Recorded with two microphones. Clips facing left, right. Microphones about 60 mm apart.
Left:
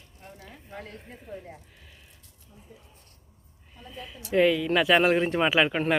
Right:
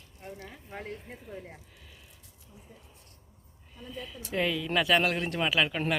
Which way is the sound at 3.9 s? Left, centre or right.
Centre.